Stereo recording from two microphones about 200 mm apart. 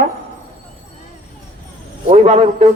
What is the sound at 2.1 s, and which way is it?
Speech, 35° right (ahead or behind).